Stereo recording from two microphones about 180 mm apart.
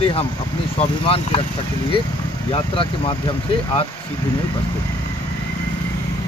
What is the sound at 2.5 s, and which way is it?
Speech, 30° left (ahead or behind).